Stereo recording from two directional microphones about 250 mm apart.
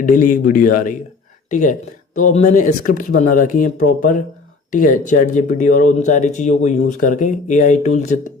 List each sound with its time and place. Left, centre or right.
0.0 s speech: left